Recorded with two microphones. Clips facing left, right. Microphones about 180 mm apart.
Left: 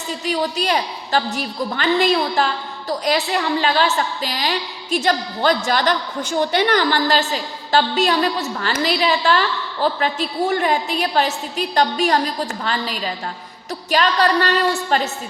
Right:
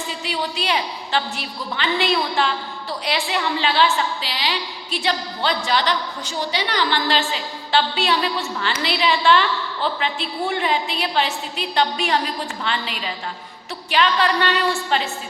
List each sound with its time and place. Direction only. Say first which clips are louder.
0.1 s a woman's voice: left 8 dB; 45° left (ahead or behind)